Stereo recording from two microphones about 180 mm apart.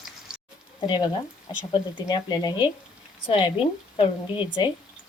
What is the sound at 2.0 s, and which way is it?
A woman's voice, 25° left (ahead or behind).